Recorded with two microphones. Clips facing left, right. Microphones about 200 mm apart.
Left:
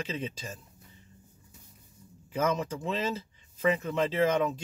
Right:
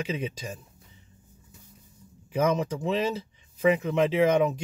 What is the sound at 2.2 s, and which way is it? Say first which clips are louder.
Speech: right 4 dB; 15° right (ahead or behind).